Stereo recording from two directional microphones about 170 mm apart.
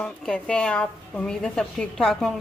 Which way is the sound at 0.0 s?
5° left (ahead or behind).